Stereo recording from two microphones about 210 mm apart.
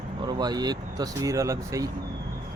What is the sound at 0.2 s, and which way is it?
Speech, 20° right (ahead or behind).